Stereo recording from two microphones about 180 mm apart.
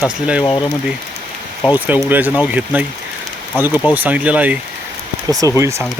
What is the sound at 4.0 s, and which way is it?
Speech, 10° right (ahead or behind).